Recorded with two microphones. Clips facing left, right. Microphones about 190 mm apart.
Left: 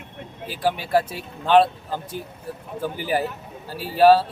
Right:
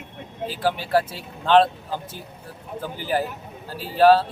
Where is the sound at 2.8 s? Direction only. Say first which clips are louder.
Left 1 dB; 15° left (ahead or behind).